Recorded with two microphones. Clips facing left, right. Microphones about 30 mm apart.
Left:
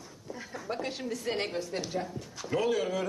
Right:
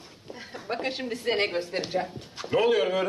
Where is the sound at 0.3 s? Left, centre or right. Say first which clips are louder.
Right 3 dB; right.